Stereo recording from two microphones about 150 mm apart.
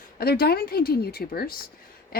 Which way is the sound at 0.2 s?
90° left.